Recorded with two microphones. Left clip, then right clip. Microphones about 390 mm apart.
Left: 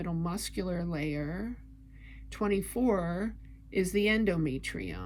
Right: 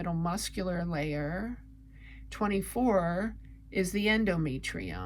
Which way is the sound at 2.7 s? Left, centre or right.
Right.